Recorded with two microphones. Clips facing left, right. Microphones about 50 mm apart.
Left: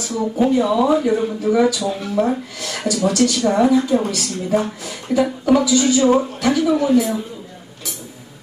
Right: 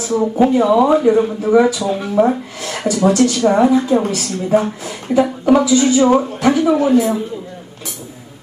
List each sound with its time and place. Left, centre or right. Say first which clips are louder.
0.0 s a woman's voice: right 4 dB; right